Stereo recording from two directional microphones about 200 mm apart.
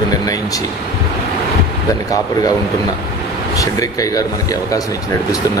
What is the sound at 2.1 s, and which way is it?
Speech, 20° left (ahead or behind).